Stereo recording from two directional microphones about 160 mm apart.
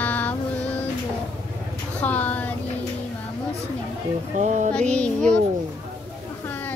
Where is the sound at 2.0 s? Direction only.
10° left (ahead or behind).